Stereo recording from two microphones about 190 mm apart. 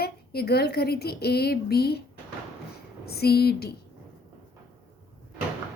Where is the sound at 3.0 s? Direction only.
55° left (ahead or behind).